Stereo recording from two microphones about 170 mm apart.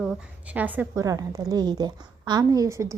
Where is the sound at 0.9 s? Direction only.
20° right (ahead or behind).